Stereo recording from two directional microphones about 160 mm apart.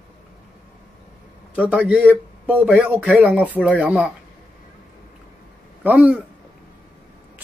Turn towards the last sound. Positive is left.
turn(degrees=-10)  # may be behind; listen again after turning